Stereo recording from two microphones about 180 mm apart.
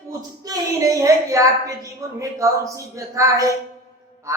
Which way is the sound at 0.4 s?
20° right (ahead or behind).